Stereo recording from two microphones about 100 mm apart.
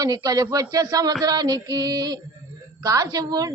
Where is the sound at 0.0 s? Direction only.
40° right (ahead or behind).